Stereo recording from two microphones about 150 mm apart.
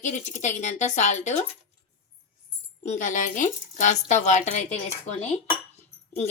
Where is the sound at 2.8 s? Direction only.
55° left (ahead or behind).